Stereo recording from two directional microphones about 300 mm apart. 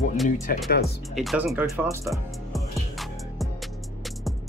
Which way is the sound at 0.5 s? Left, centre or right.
Left.